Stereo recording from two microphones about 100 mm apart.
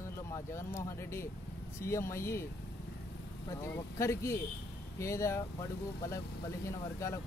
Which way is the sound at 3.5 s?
25° left (ahead or behind).